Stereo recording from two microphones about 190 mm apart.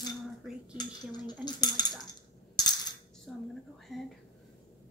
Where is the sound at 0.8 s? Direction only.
20° left (ahead or behind).